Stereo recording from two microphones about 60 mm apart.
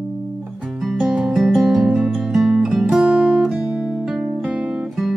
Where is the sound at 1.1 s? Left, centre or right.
Centre.